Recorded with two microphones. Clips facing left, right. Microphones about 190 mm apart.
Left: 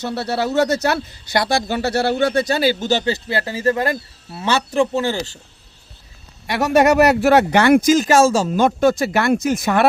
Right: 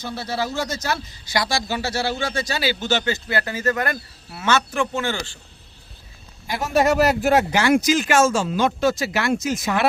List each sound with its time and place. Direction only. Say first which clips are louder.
0.0 s speech: left 5 dB; 70° left (ahead or behind); by 3.0 s 45° left (ahead or behind)
3.0 s speech: left 3 dB; 30° left (ahead or behind)
6.5 s speech: left 5 dB; 70° left (ahead or behind)